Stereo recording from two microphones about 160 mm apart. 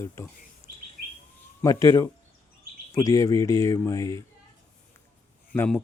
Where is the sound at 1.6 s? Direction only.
20° left (ahead or behind).